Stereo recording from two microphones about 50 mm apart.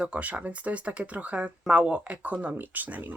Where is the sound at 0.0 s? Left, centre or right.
Right.